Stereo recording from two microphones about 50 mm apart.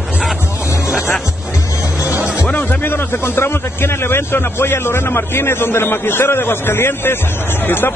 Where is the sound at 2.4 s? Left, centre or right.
Left.